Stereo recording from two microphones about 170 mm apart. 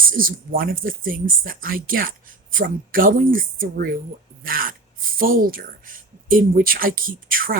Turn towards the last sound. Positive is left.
turn(degrees=-55)  # may be behind; listen again after turning